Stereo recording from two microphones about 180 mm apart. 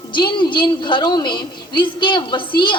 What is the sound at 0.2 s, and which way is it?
A woman's voice, 25° left (ahead or behind).